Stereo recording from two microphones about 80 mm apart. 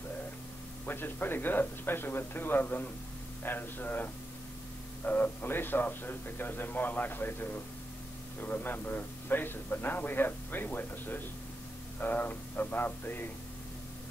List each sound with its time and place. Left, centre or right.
0.8 s a man's voice: left